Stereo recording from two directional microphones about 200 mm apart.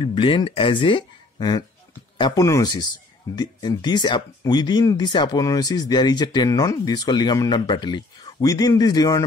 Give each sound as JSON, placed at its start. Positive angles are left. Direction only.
{"t": 0.0, "sound": "speech", "side_deg": 25}